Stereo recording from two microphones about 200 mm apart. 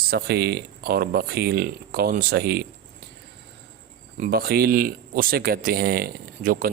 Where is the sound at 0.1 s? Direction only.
55° right (ahead or behind).